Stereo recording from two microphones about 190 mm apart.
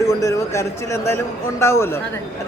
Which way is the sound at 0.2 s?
15° left (ahead or behind).